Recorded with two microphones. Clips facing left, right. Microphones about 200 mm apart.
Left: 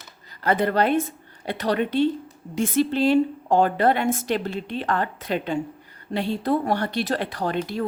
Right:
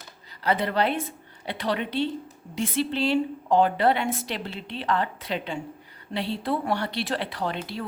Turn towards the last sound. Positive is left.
turn(degrees=45)  # may be behind; listen again after turning